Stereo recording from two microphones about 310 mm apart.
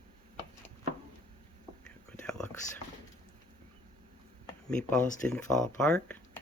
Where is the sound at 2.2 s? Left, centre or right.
Centre.